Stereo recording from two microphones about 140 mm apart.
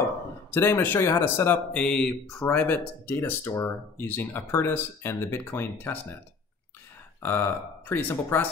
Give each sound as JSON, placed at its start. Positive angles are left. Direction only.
{"t": 0.5, "sound": "speech", "side_deg": 15}
{"t": 7.2, "sound": "speech", "side_deg": 15}